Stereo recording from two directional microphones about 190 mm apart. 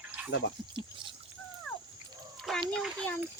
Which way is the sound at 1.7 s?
5° left (ahead or behind).